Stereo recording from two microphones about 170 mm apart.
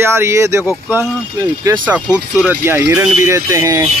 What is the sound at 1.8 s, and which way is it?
Speech, 10° right (ahead or behind).